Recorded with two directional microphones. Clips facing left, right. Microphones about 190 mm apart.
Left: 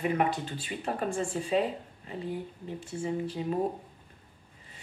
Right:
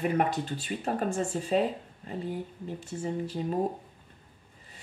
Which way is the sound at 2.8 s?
40° right (ahead or behind).